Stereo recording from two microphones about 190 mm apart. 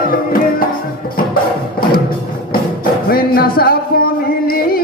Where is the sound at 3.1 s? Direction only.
50° left (ahead or behind).